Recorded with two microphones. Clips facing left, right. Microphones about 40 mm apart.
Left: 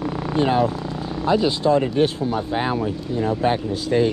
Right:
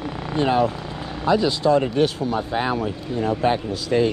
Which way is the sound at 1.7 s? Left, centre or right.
Right.